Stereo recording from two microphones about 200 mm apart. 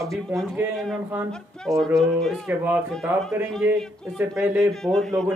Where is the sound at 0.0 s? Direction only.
15° right (ahead or behind).